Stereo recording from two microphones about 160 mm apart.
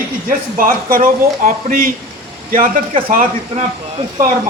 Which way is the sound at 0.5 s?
65° right (ahead or behind).